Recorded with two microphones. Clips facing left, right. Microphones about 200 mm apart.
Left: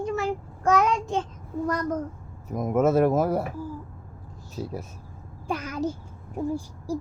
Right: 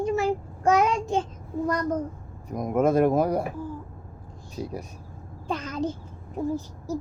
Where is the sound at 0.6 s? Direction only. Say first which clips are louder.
Right 1 dB; 10° right (ahead or behind).